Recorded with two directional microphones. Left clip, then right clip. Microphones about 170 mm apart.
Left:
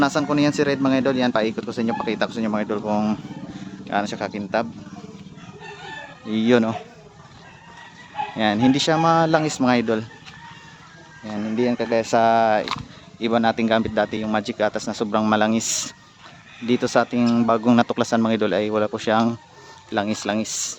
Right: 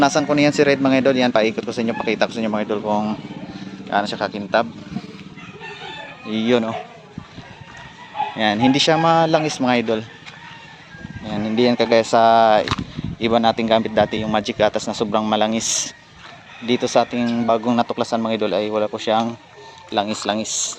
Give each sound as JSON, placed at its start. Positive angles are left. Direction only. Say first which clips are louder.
{"t": 0.0, "sound": "speech", "louder": "right 4 dB", "side_deg": 5}
{"t": 2.9, "sound": "speech", "louder": "right 1 dB", "side_deg": 30}
{"t": 3.8, "sound": "speech", "louder": "right 4 dB", "side_deg": 15}
{"t": 6.3, "sound": "speech", "louder": "even", "side_deg": 25}
{"t": 8.4, "sound": "speech", "louder": "right 2 dB", "side_deg": 10}
{"t": 11.5, "sound": "speech", "louder": "right 6 dB", "side_deg": 0}
{"t": 12.0, "sound": "speech", "louder": "right 2 dB", "side_deg": 10}